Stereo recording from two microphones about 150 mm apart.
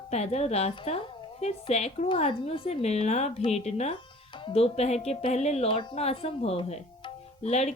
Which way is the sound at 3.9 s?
35° left (ahead or behind).